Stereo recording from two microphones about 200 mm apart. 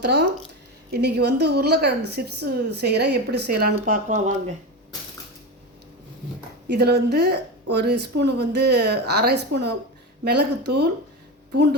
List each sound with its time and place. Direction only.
0.0 s a woman's voice: 55° right (ahead or behind)
6.7 s a woman's voice: 55° right (ahead or behind)